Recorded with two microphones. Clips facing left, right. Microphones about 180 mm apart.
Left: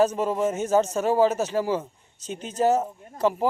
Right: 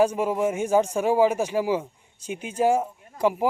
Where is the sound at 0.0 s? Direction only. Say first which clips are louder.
Even; 10° right (ahead or behind).